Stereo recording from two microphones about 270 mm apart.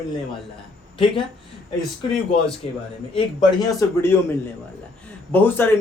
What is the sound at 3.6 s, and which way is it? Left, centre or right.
Speech, centre.